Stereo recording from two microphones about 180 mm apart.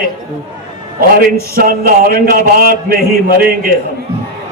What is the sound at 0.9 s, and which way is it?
A man's voice, 55° right (ahead or behind).